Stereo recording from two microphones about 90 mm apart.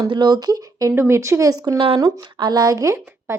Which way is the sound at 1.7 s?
85° right.